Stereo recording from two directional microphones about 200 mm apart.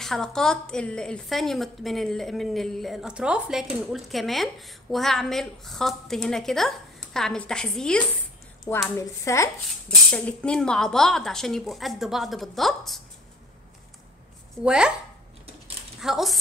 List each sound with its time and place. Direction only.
0.0 s a woman's voice: centre (ahead or behind)
14.6 s a woman's voice: 5° right (ahead or behind)
16.0 s a woman's voice: centre (ahead or behind)